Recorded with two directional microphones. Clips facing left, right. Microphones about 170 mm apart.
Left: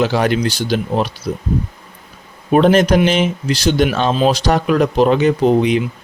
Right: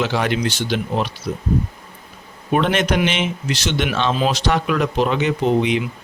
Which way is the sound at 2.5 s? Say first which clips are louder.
Left 7 dB; 35° left (ahead or behind).